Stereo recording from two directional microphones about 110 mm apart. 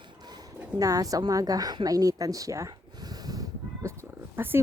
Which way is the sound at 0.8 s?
30° right (ahead or behind).